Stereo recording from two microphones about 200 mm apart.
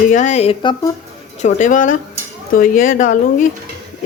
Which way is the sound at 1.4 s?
40° left (ahead or behind).